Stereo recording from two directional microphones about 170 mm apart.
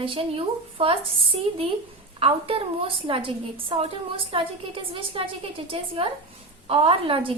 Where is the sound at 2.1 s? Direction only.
30° right (ahead or behind).